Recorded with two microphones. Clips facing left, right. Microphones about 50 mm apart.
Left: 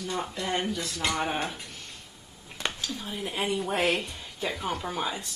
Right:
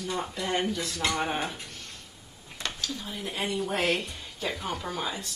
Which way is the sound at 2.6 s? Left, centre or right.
Centre.